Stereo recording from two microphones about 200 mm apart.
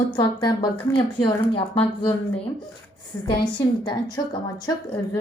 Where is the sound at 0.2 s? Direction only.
20° left (ahead or behind).